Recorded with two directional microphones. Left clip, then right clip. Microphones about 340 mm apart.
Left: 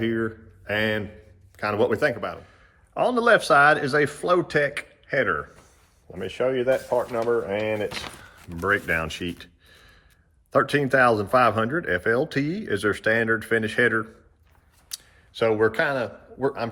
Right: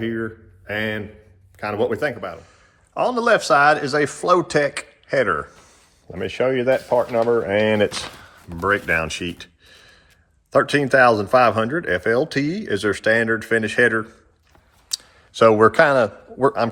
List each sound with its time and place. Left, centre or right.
0.0 s speech: centre
6.1 s speech: right
8.4 s a man's voice: centre